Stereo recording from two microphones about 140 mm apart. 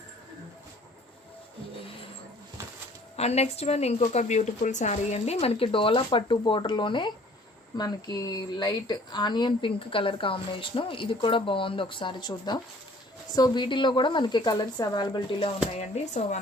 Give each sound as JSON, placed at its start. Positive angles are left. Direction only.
{"t": 3.2, "sound": "a woman's voice", "side_deg": 50}
{"t": 15.8, "sound": "a woman's voice", "side_deg": 55}